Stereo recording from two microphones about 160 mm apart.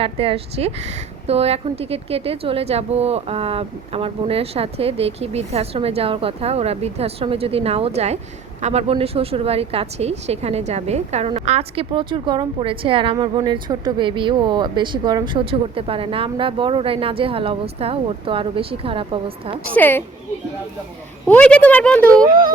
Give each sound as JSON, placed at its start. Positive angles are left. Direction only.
{"t": 0.0, "sound": "a woman's voice", "side_deg": -35}
{"t": 19.7, "sound": "speech", "side_deg": 10}
{"t": 21.2, "sound": "speech", "side_deg": 10}